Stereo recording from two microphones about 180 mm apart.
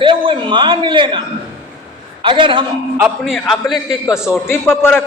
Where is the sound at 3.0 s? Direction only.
Centre (ahead or behind).